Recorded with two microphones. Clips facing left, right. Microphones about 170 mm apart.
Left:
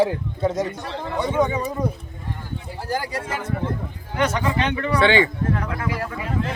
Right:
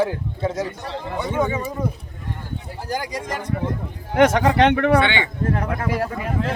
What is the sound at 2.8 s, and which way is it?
Speech, 15° right (ahead or behind).